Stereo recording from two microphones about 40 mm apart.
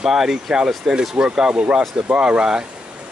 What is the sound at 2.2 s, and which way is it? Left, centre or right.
Speech, right.